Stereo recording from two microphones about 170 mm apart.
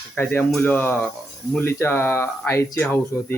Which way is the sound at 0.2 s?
10° left (ahead or behind).